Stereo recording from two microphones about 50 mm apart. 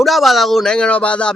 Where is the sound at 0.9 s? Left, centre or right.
Left.